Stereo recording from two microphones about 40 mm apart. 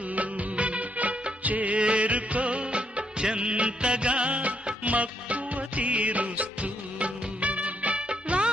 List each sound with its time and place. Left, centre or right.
0.1 s music of bollywood: right